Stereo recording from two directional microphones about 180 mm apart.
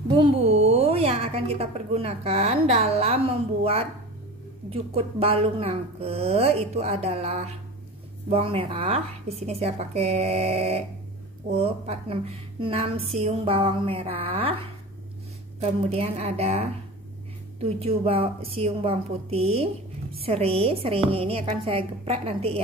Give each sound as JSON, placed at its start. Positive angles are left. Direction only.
{"t": 0.1, "sound": "a woman's voice", "side_deg": -35}
{"t": 4.6, "sound": "a woman's voice", "side_deg": -30}